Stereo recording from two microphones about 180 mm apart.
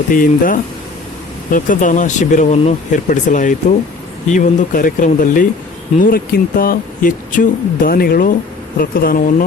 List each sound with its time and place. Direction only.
0.1 s speech: 50° left (ahead or behind)